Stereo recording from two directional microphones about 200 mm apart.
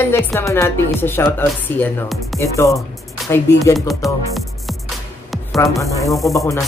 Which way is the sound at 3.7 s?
Centre (ahead or behind).